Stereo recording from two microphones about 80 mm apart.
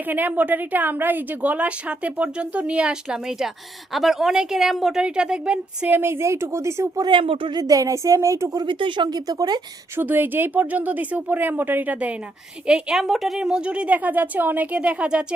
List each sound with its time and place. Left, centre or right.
0.1 s a woman's voice: right
5.9 s a woman's voice: right
7.0 s speech: right
7.6 s a woman's voice: right
8.6 s speech: right
9.1 s a woman's voice: right
9.9 s a woman's voice: right
12.6 s a woman's voice: centre